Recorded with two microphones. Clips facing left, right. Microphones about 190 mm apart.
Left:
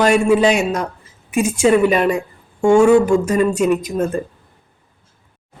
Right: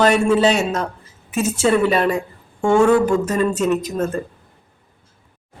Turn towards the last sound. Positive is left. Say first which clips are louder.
# left 2 dB
turn(degrees=15)  # may be behind; listen again after turning